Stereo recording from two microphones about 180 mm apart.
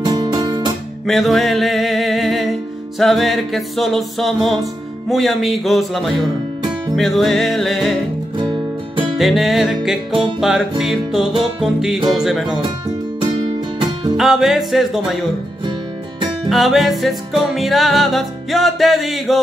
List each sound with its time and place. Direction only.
0.0 s music: 20° right (ahead or behind)
1.0 s music: centre (ahead or behind)
9.2 s music: centre (ahead or behind)
14.1 s music: centre (ahead or behind)
16.4 s music: centre (ahead or behind)